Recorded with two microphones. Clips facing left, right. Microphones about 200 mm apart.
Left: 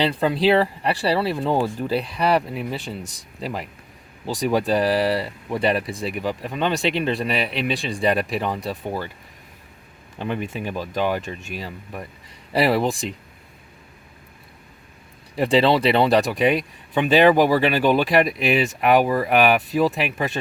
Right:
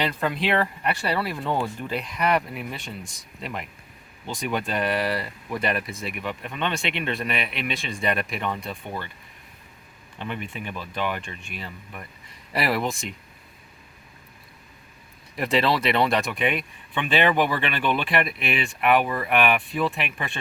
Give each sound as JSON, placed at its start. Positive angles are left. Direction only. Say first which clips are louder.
{"t": 0.0, "sound": "speech", "louder": "left 6 dB", "side_deg": 30}
{"t": 10.2, "sound": "speech", "louder": "left 6 dB", "side_deg": 40}
{"t": 15.4, "sound": "speech", "louder": "left 6 dB", "side_deg": 30}